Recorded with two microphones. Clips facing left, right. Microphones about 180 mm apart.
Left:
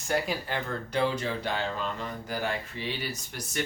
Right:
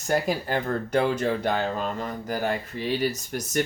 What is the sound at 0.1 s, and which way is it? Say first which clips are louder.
Speech: right 5 dB; 45° right (ahead or behind).